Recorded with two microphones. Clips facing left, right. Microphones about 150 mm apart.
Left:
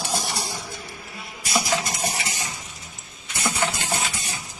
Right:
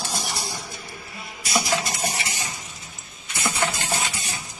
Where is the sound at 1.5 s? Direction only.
10° right (ahead or behind).